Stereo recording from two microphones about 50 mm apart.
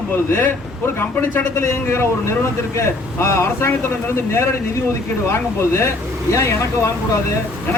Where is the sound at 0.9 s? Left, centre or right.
Left.